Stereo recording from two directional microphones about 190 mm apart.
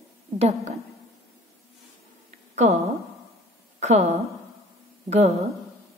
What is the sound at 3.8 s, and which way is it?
A woman's voice, 35° right (ahead or behind).